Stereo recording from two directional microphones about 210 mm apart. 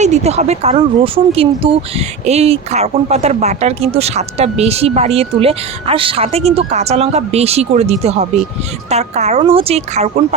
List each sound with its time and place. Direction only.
0.0 s speech: 30° right (ahead or behind)